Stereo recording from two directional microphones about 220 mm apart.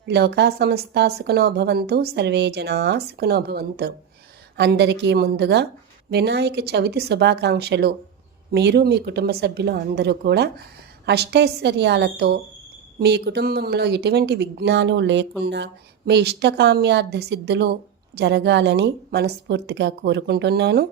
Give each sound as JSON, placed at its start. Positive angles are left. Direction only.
{"t": 0.0, "sound": "speech", "side_deg": -50}